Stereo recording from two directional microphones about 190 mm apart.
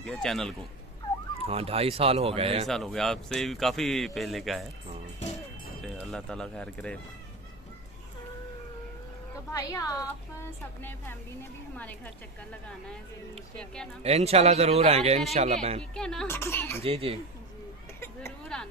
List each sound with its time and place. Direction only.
0.0 s speech: 5° left (ahead or behind)
1.4 s speech: 30° right (ahead or behind)
2.7 s speech: centre (ahead or behind)
5.8 s speech: 5° left (ahead or behind)
9.5 s a woman's voice: 15° left (ahead or behind)
14.0 s speech: 35° right (ahead or behind)
15.9 s a woman's voice: 5° left (ahead or behind)
16.8 s speech: 30° right (ahead or behind)
18.0 s speech: 10° left (ahead or behind)